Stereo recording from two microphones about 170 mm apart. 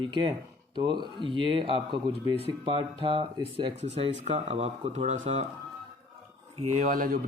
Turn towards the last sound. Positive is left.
turn(degrees=-55)  # may be behind; listen again after turning